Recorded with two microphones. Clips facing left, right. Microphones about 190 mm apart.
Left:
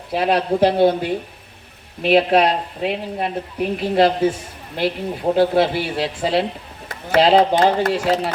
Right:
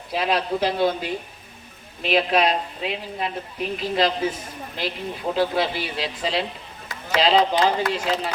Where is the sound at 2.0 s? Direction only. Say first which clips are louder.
Left 6 dB; 60° left (ahead or behind).